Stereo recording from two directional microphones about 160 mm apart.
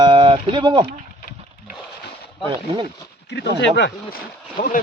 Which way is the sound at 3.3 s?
90° left.